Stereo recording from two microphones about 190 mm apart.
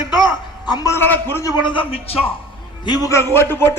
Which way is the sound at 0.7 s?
20° left (ahead or behind).